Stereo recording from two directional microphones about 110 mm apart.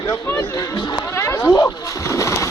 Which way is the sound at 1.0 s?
25° left (ahead or behind).